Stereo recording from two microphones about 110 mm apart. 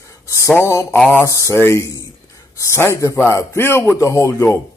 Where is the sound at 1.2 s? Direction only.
30° left (ahead or behind).